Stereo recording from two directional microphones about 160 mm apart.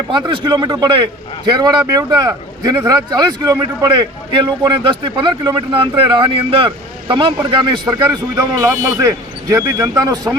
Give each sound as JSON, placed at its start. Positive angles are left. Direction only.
{"t": 0.1, "sound": "speech", "side_deg": -30}